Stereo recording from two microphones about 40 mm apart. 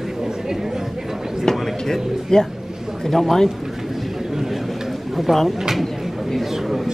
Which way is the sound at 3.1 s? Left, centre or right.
Centre.